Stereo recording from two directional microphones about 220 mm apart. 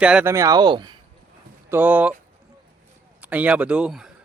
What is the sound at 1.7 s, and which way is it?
Speech, 10° right (ahead or behind).